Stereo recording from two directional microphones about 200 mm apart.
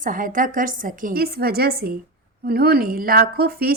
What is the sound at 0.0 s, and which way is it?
A woman's voice, 40° right (ahead or behind).